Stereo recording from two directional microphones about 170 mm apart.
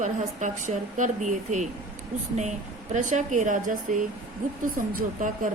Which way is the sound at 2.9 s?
45° right (ahead or behind).